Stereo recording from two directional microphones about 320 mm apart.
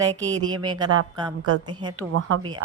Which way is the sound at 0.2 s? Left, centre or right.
Centre.